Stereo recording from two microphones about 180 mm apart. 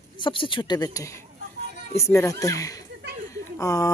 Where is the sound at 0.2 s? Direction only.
30° left (ahead or behind).